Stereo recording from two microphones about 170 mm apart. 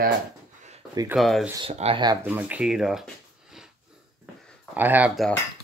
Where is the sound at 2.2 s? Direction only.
10° right (ahead or behind).